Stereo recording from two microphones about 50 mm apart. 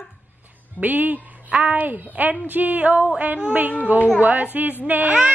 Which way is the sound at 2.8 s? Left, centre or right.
Right.